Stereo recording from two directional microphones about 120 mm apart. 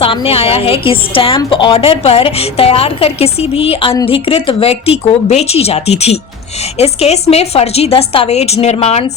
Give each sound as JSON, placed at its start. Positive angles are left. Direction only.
{"t": 0.0, "sound": "a woman's voice", "side_deg": 50}